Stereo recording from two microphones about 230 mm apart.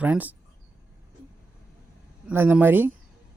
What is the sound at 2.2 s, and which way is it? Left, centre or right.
Speech, centre.